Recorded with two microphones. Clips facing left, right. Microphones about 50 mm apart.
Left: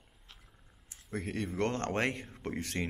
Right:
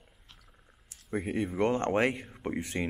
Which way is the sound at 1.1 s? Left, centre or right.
Centre.